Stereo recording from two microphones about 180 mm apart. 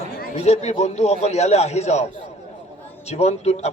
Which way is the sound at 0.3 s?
40° left (ahead or behind).